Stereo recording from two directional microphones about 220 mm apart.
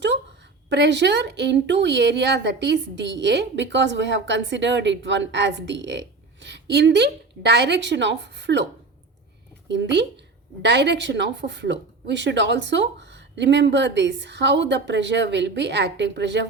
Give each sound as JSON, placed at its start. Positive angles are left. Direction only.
{"t": 0.7, "sound": "speech", "side_deg": -55}
{"t": 9.6, "sound": "speech", "side_deg": -50}